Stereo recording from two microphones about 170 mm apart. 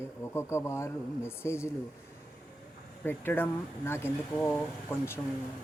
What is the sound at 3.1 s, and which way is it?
Speech, 10° left (ahead or behind).